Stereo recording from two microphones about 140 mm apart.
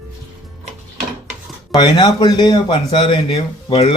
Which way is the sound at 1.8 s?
30° left (ahead or behind).